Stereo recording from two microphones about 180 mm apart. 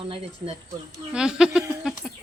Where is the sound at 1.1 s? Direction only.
5° right (ahead or behind).